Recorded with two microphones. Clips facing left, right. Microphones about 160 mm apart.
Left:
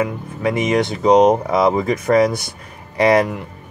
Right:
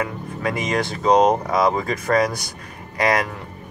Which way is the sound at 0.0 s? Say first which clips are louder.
Left 5 dB; 20° left (ahead or behind).